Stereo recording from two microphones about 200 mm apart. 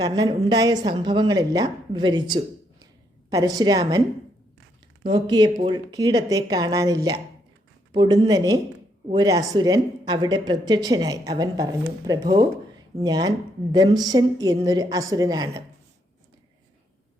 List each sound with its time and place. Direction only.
0.0 s speech: 20° right (ahead or behind)
5.0 s speech: 20° right (ahead or behind)